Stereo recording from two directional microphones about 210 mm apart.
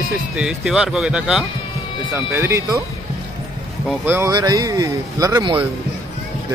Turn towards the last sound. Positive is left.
turn(degrees=-20)  # may be behind; listen again after turning